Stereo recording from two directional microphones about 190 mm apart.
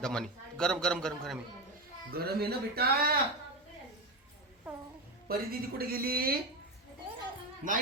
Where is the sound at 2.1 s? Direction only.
55° right (ahead or behind).